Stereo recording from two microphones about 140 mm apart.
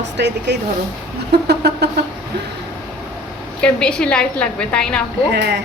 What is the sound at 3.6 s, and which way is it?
A woman's voice, 5° left (ahead or behind).